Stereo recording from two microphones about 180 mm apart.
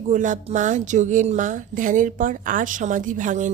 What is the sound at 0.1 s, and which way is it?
Speech, 45° right (ahead or behind).